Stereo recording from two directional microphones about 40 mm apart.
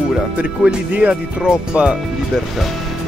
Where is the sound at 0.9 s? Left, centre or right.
Right.